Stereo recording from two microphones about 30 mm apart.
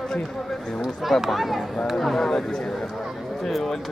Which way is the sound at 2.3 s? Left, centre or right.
Centre.